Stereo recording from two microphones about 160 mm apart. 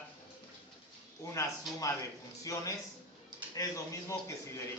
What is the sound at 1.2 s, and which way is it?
Speech, 20° left (ahead or behind).